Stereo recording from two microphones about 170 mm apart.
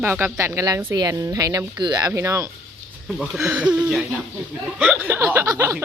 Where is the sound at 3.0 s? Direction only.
Centre (ahead or behind).